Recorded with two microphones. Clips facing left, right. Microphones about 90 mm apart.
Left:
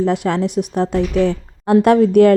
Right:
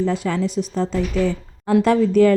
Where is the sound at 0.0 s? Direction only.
60° left (ahead or behind).